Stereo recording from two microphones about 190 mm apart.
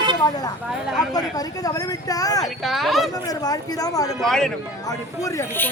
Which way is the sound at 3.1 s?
20° left (ahead or behind).